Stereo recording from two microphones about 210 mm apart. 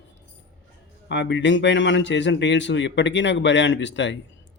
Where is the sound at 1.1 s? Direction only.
60° left (ahead or behind).